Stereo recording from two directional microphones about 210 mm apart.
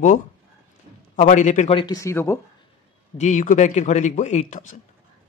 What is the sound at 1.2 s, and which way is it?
Speech, 35° left (ahead or behind).